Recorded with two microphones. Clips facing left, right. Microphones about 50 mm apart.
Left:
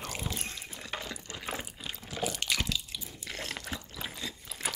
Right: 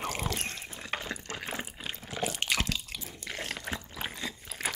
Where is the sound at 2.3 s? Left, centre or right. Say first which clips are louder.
Right 2 dB; right.